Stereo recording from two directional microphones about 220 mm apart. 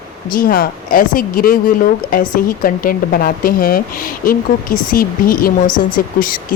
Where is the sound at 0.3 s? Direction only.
40° left (ahead or behind).